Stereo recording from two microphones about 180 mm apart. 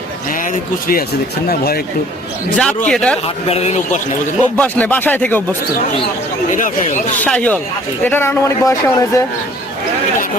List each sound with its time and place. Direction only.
1.5 s speech: 55° left (ahead or behind)
2.6 s speech: 5° left (ahead or behind)
3.2 s a man's voice: 35° left (ahead or behind)
4.5 s speech: 10° left (ahead or behind)
6.5 s speech: 45° left (ahead or behind)
7.2 s speech: 5° left (ahead or behind)